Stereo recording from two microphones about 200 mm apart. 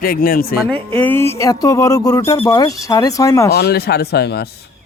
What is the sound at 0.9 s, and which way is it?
Speech, 10° left (ahead or behind).